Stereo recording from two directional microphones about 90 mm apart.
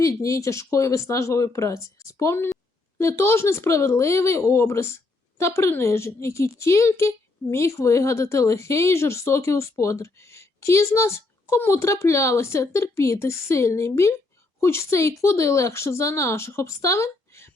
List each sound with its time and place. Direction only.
0.0 s speech: 35° left (ahead or behind)